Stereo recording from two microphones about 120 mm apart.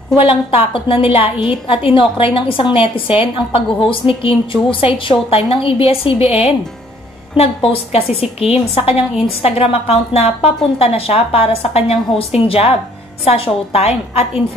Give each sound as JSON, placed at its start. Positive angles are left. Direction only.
{"t": 0.2, "sound": "a woman's voice", "side_deg": 50}